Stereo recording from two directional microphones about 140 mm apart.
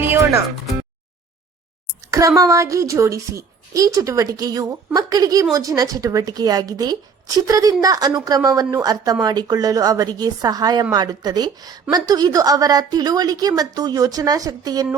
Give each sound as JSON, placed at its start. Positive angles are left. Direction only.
{"t": 0.0, "sound": "music", "side_deg": -20}
{"t": 2.0, "sound": "a woman's voice", "side_deg": -25}